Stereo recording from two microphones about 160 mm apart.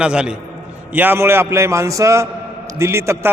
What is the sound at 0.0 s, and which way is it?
A man's voice, 5° right (ahead or behind).